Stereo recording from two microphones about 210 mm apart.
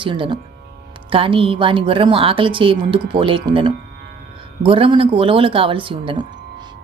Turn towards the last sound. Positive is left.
turn(degrees=-25)  # may be behind; listen again after turning